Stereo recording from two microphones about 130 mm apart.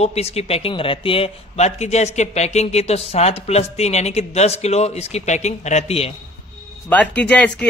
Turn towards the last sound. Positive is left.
turn(degrees=10)  # may be behind; listen again after turning